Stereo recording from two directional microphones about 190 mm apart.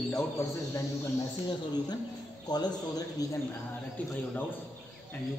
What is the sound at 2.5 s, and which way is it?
Speech, 20° left (ahead or behind).